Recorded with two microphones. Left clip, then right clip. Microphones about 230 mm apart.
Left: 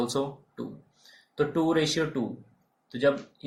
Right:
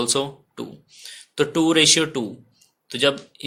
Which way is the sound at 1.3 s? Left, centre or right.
Right.